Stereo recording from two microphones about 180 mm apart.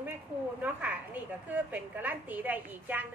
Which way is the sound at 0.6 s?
5° right (ahead or behind).